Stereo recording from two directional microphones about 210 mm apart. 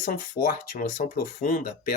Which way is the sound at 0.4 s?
40° left (ahead or behind).